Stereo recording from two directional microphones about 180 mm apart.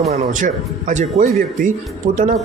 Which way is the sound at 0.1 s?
45° right (ahead or behind).